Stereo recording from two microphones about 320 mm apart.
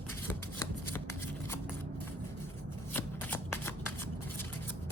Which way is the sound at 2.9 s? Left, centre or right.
Centre.